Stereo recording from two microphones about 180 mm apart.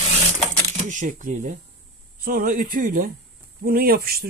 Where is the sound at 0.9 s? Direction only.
45° right (ahead or behind).